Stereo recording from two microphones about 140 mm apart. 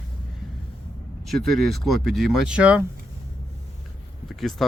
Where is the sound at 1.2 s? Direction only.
Centre (ahead or behind).